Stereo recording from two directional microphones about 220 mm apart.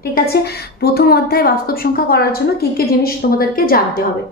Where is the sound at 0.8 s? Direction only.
45° left (ahead or behind).